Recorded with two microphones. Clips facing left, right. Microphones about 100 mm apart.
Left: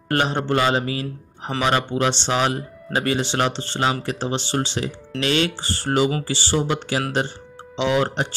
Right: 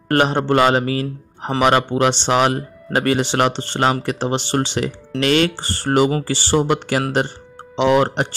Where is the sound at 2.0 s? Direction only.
55° right (ahead or behind).